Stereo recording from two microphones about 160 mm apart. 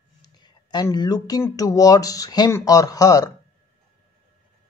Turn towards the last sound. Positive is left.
turn(degrees=20)  # may be behind; listen again after turning